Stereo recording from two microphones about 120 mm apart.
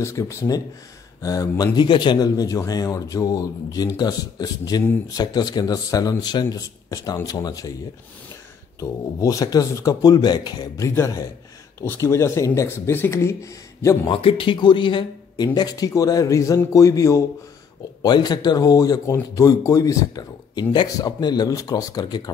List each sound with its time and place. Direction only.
0.0 s speech: 25° left (ahead or behind)
8.7 s speech: 30° left (ahead or behind)
11.8 s speech: 20° left (ahead or behind)
14.1 s speech: 50° left (ahead or behind)